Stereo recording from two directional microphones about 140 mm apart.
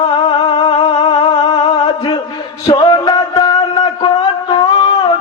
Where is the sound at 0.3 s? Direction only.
35° left (ahead or behind).